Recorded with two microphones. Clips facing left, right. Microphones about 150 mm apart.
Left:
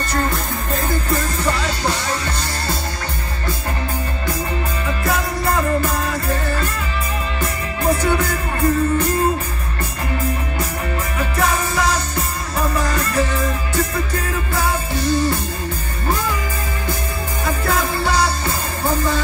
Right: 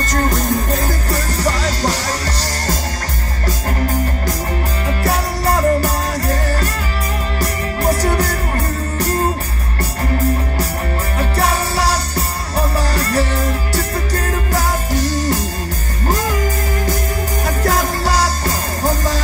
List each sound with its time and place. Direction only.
0.7 s music: 35° right (ahead or behind)
4.8 s music: 35° right (ahead or behind)
11.1 s music: 35° right (ahead or behind)
17.5 s music: 40° right (ahead or behind)